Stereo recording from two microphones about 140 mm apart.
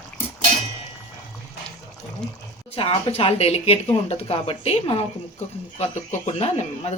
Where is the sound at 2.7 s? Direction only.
40° left (ahead or behind).